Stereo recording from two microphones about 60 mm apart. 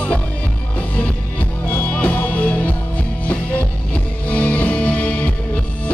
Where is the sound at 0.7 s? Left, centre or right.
Left.